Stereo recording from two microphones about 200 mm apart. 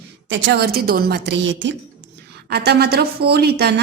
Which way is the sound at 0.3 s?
60° right (ahead or behind).